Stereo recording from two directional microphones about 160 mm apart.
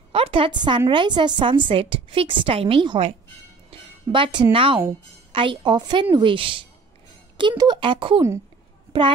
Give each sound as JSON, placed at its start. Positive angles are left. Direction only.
{"t": 0.1, "sound": "a woman's voice", "side_deg": -35}